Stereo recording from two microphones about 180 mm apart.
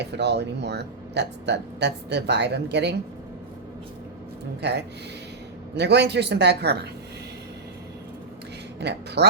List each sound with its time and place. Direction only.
0.0 s speech: 70° right (ahead or behind)
5.7 s speech: 70° right (ahead or behind)
8.8 s speech: 70° right (ahead or behind)